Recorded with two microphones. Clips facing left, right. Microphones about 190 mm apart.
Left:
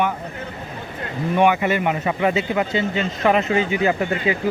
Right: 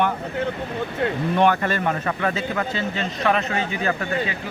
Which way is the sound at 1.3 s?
10° left (ahead or behind).